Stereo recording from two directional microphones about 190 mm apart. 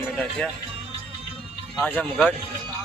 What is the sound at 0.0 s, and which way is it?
Speech, centre (ahead or behind).